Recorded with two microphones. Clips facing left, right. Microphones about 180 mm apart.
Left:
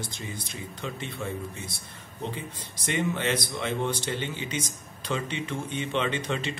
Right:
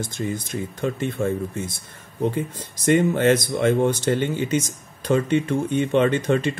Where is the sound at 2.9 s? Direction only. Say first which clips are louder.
Right 11 dB; 45° right (ahead or behind).